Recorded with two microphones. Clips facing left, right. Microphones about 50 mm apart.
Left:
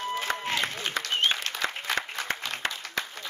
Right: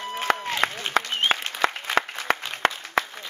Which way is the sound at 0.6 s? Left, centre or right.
Right.